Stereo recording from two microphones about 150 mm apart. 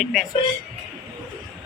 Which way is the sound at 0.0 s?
Centre (ahead or behind).